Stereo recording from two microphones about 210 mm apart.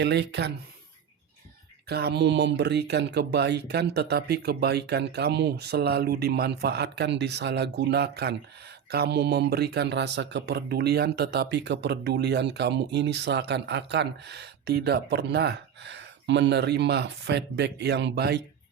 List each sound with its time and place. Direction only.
0.0 s speech: 55° right (ahead or behind)
1.9 s speech: 50° right (ahead or behind)